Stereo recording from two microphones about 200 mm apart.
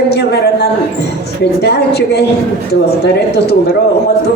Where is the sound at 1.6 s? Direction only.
55° left (ahead or behind).